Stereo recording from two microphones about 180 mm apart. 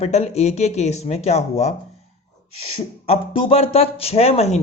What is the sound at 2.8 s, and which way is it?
A man's voice, 30° left (ahead or behind).